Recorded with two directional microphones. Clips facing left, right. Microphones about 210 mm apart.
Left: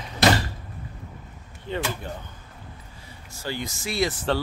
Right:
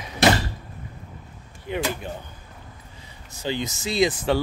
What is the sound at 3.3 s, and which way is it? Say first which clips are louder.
Speech: right 4 dB; 20° right (ahead or behind).